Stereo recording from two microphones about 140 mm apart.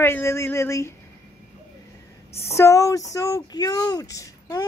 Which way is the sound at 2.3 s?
45° left (ahead or behind).